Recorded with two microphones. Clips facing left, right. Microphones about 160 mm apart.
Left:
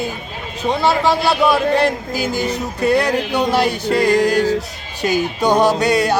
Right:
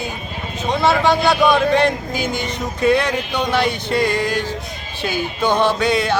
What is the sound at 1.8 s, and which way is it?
Speech, 5° left (ahead or behind).